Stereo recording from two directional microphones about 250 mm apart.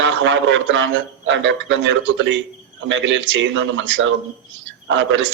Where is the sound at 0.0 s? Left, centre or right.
Right.